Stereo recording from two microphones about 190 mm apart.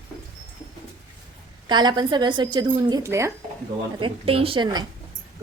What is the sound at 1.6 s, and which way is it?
A woman's voice, 20° right (ahead or behind).